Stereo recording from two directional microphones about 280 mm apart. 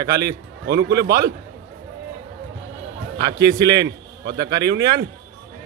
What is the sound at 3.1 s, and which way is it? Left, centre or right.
A man's voice, centre.